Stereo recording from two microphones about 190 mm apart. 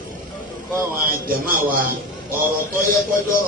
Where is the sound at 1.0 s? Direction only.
50° right (ahead or behind).